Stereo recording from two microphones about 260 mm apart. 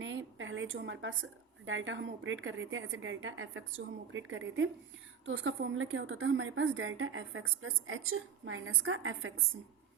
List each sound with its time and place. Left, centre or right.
0.0 s a woman's voice: right